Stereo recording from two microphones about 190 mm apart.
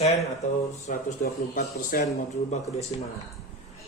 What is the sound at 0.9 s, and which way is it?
Speech, 45° left (ahead or behind).